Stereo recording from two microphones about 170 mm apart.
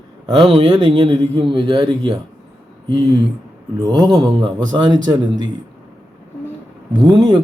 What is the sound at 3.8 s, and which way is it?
Speech, 20° right (ahead or behind).